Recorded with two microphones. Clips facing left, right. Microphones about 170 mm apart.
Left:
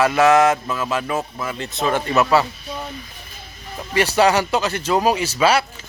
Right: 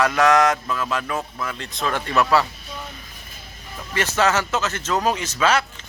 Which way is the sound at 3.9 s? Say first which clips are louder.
Left 4 dB; 15° left (ahead or behind).